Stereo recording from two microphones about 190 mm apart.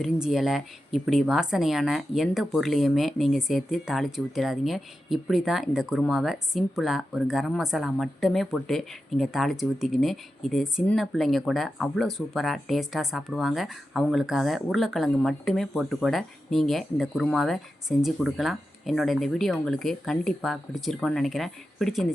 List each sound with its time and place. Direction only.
0.0 s speech: centre (ahead or behind)